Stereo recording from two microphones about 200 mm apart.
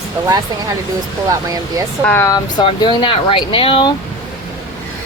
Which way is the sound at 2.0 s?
10° left (ahead or behind).